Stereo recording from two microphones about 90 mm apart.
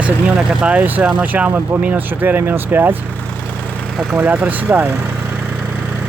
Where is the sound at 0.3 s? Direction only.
10° right (ahead or behind).